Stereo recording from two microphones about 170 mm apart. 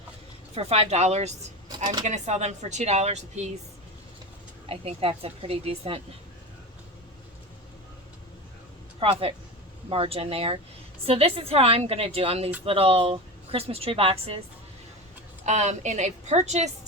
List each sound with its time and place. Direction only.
0.5 s a woman's voice: 35° right (ahead or behind)
4.7 s a woman's voice: 35° right (ahead or behind)
9.0 s a woman's voice: 35° right (ahead or behind)
15.4 s a woman's voice: 45° right (ahead or behind)